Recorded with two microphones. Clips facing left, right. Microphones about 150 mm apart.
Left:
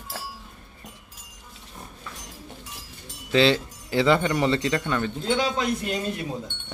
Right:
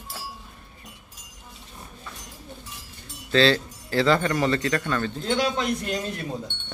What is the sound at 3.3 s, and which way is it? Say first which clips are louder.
Speech: even; 15° left (ahead or behind).